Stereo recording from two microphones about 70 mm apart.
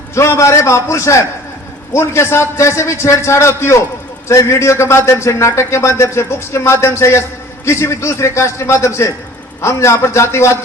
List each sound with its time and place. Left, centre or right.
0.1 s a man's voice: left